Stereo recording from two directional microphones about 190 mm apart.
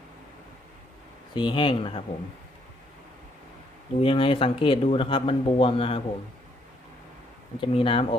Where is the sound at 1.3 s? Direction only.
25° left (ahead or behind).